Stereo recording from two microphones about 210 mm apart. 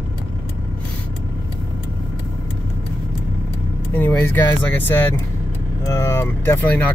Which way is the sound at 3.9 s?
10° left (ahead or behind).